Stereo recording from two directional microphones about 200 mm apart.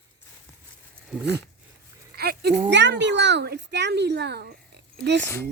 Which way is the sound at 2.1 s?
50° right (ahead or behind).